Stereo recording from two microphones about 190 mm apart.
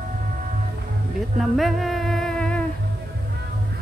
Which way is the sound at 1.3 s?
Centre (ahead or behind).